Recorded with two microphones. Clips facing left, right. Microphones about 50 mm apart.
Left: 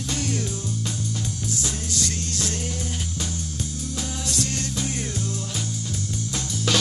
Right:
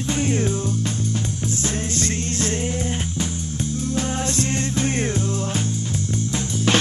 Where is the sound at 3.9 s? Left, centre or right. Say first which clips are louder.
Right 5 dB; right.